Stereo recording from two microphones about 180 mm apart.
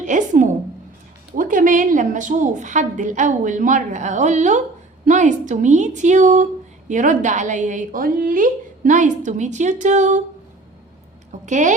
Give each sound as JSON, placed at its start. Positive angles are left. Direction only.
{"t": 0.0, "sound": "a woman's voice", "side_deg": -45}
{"t": 11.4, "sound": "a woman's voice", "side_deg": -45}